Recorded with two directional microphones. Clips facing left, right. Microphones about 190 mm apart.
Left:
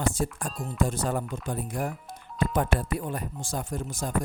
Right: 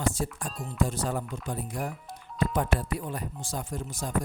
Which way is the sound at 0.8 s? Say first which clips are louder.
Left 2 dB; 50° left (ahead or behind).